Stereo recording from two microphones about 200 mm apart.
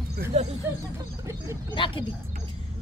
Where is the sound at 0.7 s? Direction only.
10° right (ahead or behind).